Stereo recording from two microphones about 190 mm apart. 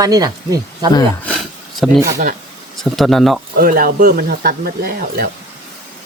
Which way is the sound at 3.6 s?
50° right (ahead or behind).